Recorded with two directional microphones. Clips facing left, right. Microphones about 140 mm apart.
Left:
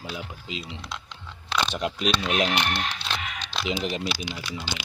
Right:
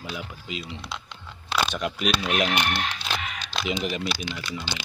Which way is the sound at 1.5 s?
5° right (ahead or behind).